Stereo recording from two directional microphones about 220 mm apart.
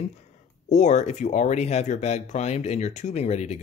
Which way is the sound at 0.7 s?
30° left (ahead or behind).